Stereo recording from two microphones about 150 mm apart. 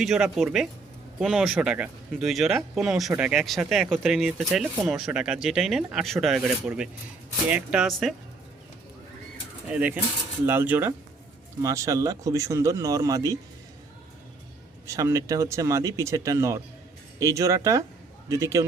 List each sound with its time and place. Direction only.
0.0 s speech: centre (ahead or behind)
9.6 s speech: 10° right (ahead or behind)
14.8 s speech: 20° right (ahead or behind)